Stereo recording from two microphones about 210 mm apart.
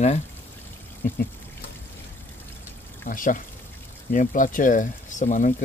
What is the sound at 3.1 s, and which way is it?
Speech, 40° left (ahead or behind).